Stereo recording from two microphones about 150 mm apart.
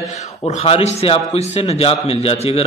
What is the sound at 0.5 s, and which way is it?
A man's voice, 45° left (ahead or behind).